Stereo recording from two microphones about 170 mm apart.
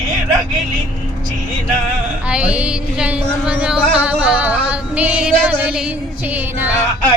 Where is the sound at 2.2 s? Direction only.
5° right (ahead or behind).